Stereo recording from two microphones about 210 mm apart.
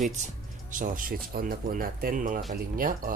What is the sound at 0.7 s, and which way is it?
Speech, 40° right (ahead or behind).